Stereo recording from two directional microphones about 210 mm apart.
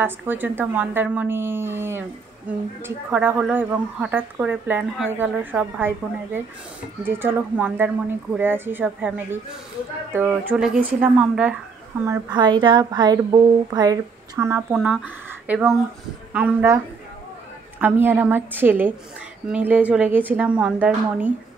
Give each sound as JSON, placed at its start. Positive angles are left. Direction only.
{"t": 0.0, "sound": "a woman's voice", "side_deg": -10}
{"t": 12.1, "sound": "speech", "side_deg": -20}